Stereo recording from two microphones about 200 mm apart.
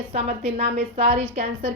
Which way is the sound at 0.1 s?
35° right (ahead or behind).